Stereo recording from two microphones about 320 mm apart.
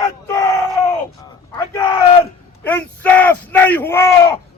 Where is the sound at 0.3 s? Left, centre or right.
Centre.